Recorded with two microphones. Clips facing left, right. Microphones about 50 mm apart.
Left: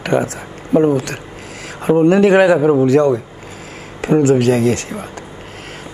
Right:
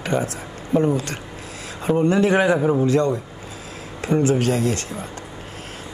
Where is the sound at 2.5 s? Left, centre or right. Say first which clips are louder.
Left 7 dB; left.